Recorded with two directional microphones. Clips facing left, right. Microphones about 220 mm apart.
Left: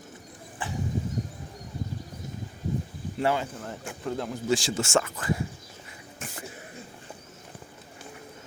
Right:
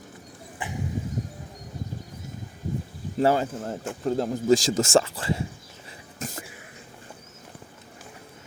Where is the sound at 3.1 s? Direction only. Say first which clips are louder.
Right 5 dB; 40° right (ahead or behind).